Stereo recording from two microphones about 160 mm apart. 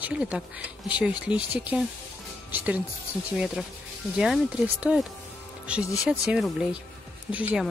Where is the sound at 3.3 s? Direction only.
5° right (ahead or behind).